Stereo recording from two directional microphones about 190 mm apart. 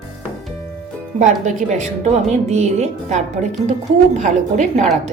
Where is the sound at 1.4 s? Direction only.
40° right (ahead or behind).